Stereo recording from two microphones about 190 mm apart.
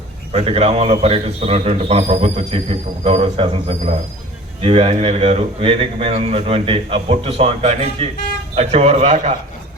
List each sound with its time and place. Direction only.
0.3 s a man's voice: 30° right (ahead or behind)